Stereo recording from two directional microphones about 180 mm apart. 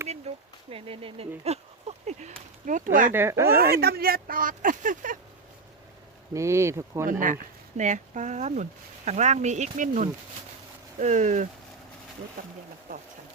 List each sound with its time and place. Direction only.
0.1 s speech: 35° right (ahead or behind); by 3.1 s 50° right (ahead or behind)
3.1 s speech: 15° right (ahead or behind)
3.6 s speech: 60° right (ahead or behind)
6.3 s speech: 15° right (ahead or behind)
7.1 s speech: 45° right (ahead or behind)